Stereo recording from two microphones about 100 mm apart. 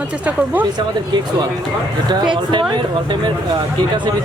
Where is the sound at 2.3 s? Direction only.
50° right (ahead or behind).